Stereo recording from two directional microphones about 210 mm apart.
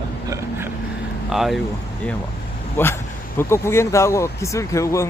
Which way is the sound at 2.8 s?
10° left (ahead or behind).